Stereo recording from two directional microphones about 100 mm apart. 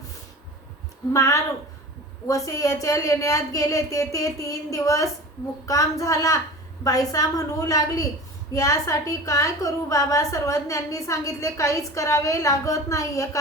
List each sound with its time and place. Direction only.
1.1 s a woman's voice: 30° left (ahead or behind)